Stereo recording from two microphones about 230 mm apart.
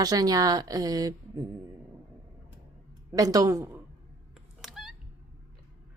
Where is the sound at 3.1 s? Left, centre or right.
Centre.